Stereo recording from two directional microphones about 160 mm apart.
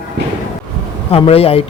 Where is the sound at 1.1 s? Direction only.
35° left (ahead or behind).